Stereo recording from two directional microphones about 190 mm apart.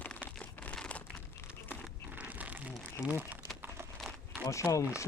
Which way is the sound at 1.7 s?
10° right (ahead or behind).